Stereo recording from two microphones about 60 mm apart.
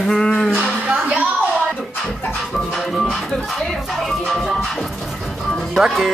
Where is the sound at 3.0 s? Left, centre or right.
Centre.